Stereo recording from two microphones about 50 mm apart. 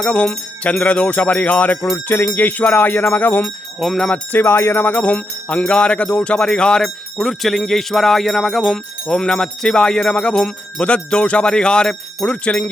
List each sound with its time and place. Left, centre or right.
0.0 s music: left
2.0 s jingle bell: left
3.8 s jingle bell: centre
4.4 s music: left; by 6.8 s centre
6.8 s jingle bell: centre; by 12.7 s left